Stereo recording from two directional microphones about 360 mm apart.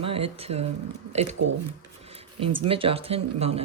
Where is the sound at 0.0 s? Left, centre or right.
Centre.